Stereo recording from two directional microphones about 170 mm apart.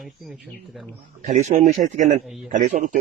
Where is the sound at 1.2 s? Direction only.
40° right (ahead or behind).